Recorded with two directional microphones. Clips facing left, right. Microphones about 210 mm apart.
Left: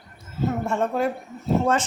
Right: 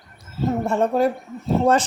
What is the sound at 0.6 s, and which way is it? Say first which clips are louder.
Speech: right 6 dB; 35° right (ahead or behind).